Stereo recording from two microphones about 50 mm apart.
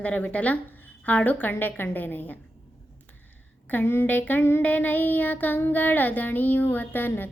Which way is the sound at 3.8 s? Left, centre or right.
Left.